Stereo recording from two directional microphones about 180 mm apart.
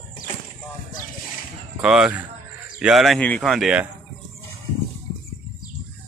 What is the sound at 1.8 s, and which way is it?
Speech, 5° right (ahead or behind).